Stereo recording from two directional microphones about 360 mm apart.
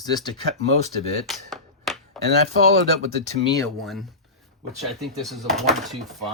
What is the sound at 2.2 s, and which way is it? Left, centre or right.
Speech, right.